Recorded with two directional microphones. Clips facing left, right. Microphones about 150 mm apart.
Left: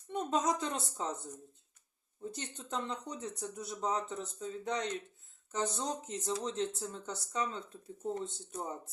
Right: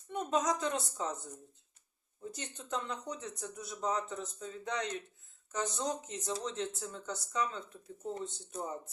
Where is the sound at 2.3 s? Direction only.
25° left (ahead or behind).